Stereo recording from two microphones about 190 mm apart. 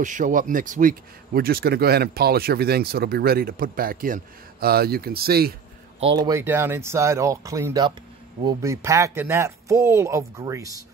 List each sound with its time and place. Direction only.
0.0 s speech: 40° right (ahead or behind)
5.9 s speech: 25° right (ahead or behind)